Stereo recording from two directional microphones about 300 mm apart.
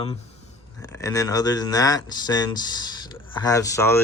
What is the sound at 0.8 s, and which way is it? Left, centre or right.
Speech, centre.